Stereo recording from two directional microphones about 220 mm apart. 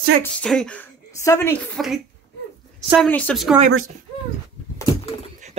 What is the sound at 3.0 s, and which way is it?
Speech, 5° left (ahead or behind).